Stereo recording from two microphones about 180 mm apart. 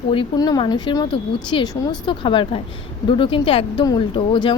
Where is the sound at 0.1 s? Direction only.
25° left (ahead or behind).